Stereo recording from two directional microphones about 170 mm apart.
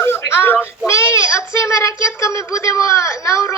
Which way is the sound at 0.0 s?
15° left (ahead or behind).